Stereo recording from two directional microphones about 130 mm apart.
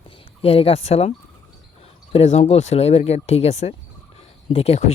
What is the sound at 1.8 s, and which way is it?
Speech, 55° left (ahead or behind).